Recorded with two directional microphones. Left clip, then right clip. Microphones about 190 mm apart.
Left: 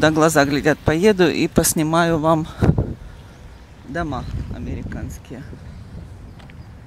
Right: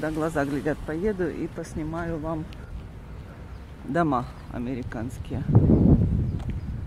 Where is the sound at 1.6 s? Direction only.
50° left (ahead or behind).